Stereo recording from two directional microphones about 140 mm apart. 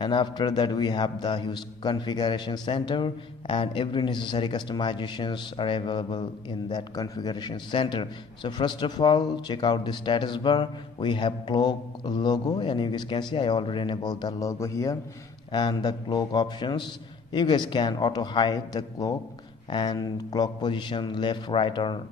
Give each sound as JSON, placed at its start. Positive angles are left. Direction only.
{"t": 0.0, "sound": "a man's voice", "side_deg": 35}